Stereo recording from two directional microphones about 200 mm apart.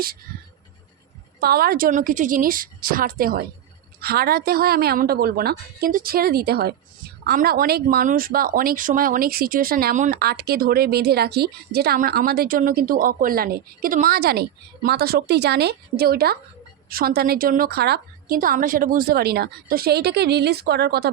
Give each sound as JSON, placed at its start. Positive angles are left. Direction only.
{"t": 1.4, "sound": "speech", "side_deg": -50}